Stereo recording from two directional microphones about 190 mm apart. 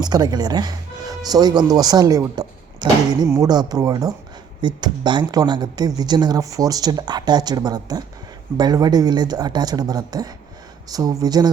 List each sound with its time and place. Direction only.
0.0 s speech: 20° right (ahead or behind)